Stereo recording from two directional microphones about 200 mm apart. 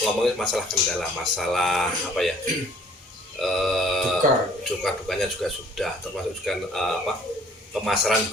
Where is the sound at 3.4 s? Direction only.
Centre (ahead or behind).